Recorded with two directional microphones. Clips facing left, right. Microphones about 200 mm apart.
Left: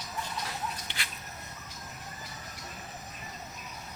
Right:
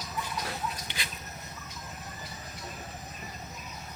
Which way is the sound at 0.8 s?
15° right (ahead or behind).